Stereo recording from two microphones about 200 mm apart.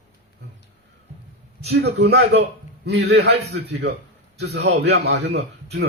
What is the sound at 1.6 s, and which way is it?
A man's voice, 55° right (ahead or behind).